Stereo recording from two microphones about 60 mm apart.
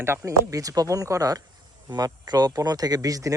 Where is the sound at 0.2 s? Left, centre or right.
Right.